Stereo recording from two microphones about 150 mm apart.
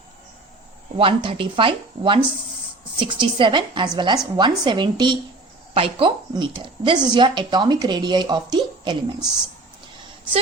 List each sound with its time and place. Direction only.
0.9 s a woman's voice: 35° right (ahead or behind)